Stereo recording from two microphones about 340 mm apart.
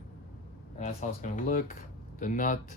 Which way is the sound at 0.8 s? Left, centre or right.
Left.